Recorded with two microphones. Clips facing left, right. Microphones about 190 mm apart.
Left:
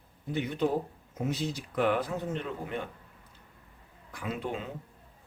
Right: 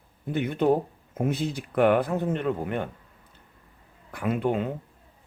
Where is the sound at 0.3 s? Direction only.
55° right (ahead or behind).